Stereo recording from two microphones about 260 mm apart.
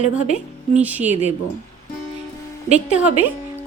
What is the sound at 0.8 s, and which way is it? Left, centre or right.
Speech, centre.